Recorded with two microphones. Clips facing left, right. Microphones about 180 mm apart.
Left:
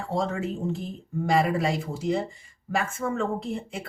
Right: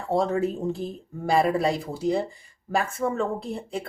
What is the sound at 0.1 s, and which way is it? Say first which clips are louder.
Speech: right 5 dB; 35° right (ahead or behind).